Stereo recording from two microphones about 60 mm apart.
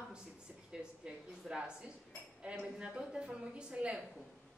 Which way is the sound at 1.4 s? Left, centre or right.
Centre.